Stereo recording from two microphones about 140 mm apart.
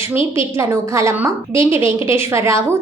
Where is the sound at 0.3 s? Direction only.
20° right (ahead or behind).